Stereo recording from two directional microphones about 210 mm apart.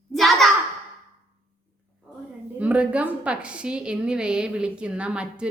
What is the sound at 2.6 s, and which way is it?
A woman's voice, 5° right (ahead or behind).